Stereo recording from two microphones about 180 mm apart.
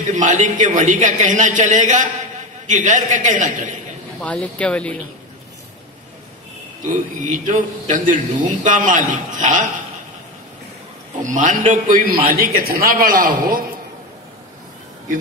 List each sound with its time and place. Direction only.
0.0 s a man's voice: 45° right (ahead or behind)
4.2 s speech: 5° left (ahead or behind)
7.3 s a man's voice: 45° right (ahead or behind)
11.2 s a man's voice: 45° right (ahead or behind)